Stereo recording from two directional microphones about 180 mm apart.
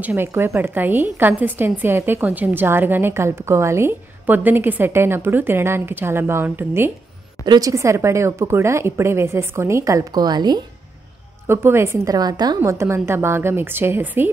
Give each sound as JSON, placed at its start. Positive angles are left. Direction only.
{"t": 0.0, "sound": "a woman's voice", "side_deg": -10}